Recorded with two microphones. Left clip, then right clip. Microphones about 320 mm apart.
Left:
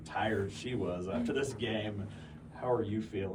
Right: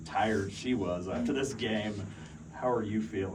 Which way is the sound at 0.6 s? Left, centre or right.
Right.